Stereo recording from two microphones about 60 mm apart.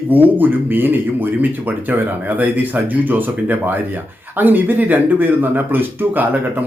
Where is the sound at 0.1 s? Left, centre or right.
Right.